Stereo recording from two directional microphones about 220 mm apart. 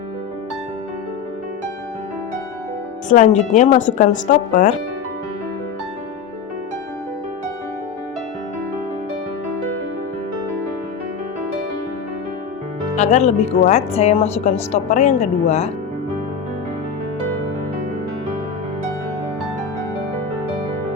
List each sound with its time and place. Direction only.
3.1 s a woman's voice: 35° left (ahead or behind)
13.0 s a woman's voice: 30° left (ahead or behind)